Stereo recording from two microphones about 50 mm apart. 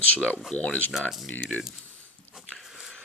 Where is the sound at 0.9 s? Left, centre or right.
Centre.